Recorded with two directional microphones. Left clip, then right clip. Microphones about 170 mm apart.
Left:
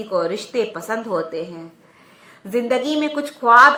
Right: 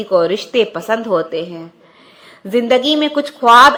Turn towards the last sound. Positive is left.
turn(degrees=-30)  # may be behind; listen again after turning